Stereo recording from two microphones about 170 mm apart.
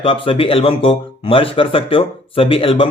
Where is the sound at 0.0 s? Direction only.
30° left (ahead or behind).